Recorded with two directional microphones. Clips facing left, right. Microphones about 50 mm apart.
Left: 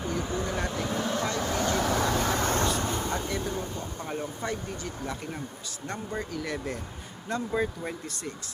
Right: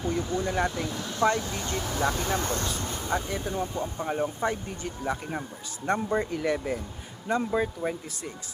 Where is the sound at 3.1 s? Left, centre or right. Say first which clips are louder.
Right 1 dB; centre.